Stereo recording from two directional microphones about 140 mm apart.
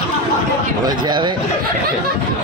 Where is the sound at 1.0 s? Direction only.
35° right (ahead or behind).